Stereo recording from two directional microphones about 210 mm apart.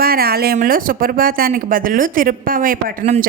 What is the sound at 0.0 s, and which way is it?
A woman's voice, 45° right (ahead or behind).